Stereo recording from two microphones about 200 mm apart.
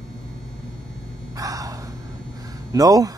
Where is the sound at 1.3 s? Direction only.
15° right (ahead or behind).